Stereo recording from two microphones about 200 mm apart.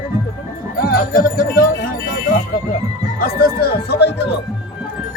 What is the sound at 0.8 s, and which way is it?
Speech, 50° left (ahead or behind).